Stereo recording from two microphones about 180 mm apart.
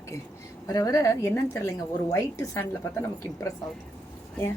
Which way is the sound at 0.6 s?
20° left (ahead or behind).